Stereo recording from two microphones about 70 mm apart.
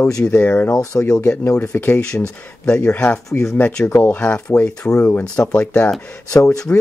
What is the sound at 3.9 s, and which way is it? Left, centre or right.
Speech, left.